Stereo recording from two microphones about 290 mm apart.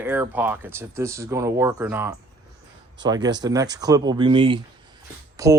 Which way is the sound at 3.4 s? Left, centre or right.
Centre.